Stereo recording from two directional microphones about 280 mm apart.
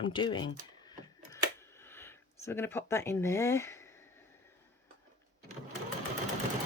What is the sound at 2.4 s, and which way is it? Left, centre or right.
Speech, centre.